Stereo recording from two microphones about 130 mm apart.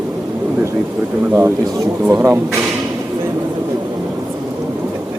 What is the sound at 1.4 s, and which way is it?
Speech, 20° right (ahead or behind).